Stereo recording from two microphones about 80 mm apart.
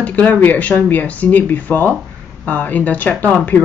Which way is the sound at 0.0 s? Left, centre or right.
Centre.